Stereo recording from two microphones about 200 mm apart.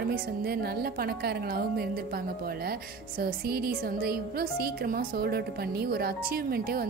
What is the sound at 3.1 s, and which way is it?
A woman's voice, 50° right (ahead or behind).